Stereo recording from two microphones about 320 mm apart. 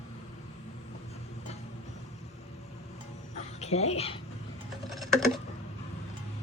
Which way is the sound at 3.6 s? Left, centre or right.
Centre.